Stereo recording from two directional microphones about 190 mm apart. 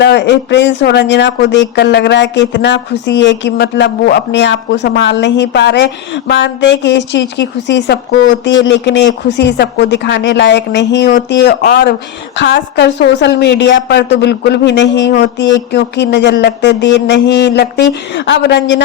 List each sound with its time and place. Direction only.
0.0 s speech: 65° left (ahead or behind)
12.4 s speech: 70° left (ahead or behind)